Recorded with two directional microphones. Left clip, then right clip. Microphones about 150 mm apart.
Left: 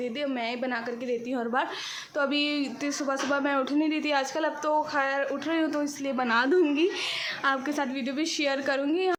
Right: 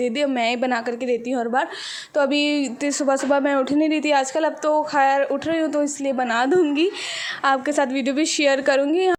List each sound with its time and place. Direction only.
0.3 s a woman's voice: 55° right (ahead or behind)